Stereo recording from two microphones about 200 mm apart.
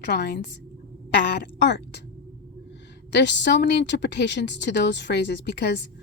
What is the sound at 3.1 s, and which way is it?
Speech, 60° left (ahead or behind).